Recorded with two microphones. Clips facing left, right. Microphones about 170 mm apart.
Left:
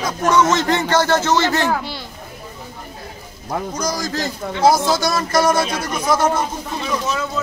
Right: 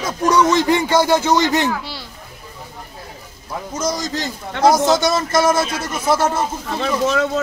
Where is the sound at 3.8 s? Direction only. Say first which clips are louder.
Right 4 dB; 20° right (ahead or behind).